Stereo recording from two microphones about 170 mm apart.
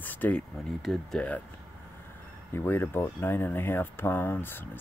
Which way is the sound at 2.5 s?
15° left (ahead or behind).